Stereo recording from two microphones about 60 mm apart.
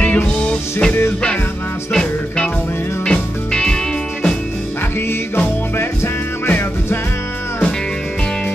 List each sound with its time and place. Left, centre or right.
0.0 s music: left
6.4 s music: left